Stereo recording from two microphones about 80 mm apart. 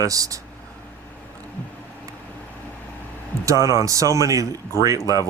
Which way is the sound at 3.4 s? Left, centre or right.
Right.